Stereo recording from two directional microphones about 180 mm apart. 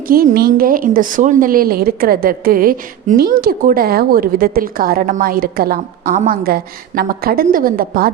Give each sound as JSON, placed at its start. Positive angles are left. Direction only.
{"t": 0.1, "sound": "a woman's voice", "side_deg": -55}